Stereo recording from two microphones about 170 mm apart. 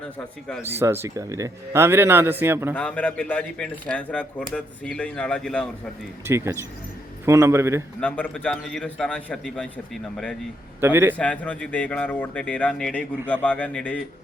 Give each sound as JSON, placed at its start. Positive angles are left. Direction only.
{"t": 0.8, "sound": "speech", "side_deg": -15}
{"t": 2.7, "sound": "speech", "side_deg": 10}
{"t": 6.2, "sound": "speech", "side_deg": -15}
{"t": 8.0, "sound": "a man's voice", "side_deg": 10}
{"t": 10.8, "sound": "a man's voice", "side_deg": -15}
{"t": 11.2, "sound": "speech", "side_deg": 10}